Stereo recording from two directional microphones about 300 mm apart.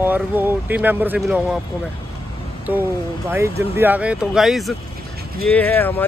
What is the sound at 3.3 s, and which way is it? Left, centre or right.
Speech, centre.